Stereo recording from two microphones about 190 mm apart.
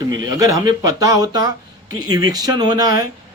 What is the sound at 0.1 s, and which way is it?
Speech, 20° right (ahead or behind).